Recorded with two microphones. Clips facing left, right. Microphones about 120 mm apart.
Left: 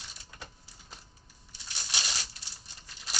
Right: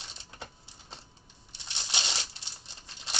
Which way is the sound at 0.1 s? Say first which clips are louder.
Right 3 dB; 25° right (ahead or behind).